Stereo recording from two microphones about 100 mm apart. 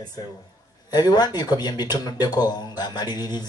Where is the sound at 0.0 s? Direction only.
40° left (ahead or behind).